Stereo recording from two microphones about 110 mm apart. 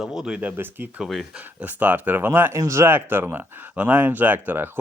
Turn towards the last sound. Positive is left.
turn(degrees=-15)  # may be behind; listen again after turning